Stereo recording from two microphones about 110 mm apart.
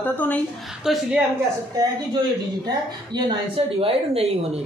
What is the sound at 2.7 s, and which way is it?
Speech, 40° right (ahead or behind).